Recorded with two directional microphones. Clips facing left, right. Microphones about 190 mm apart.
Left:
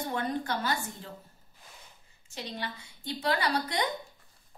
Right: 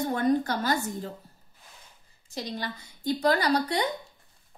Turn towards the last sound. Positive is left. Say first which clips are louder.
# right 6 dB
turn(degrees=-40)  # may be behind; listen again after turning